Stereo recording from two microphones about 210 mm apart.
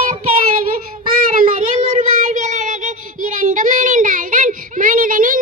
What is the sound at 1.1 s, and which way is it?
Child singing, 40° right (ahead or behind).